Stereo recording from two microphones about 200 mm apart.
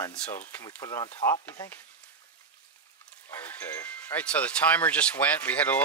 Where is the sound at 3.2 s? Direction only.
10° left (ahead or behind).